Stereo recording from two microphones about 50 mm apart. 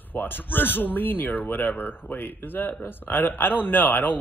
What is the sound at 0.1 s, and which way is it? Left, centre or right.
Speech, left.